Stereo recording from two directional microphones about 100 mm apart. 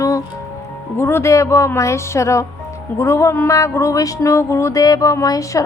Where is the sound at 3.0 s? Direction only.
30° left (ahead or behind).